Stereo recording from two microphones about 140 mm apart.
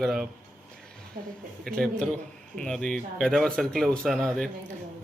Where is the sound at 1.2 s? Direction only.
85° right.